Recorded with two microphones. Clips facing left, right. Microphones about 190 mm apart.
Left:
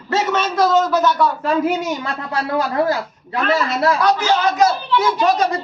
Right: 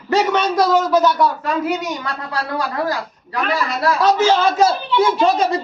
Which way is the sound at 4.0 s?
25° right (ahead or behind).